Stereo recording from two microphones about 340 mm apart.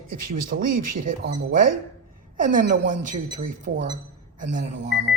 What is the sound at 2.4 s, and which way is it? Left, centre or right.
A woman's voice, right.